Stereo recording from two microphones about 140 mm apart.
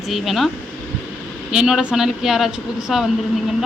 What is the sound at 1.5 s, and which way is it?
Speech, 5° right (ahead or behind).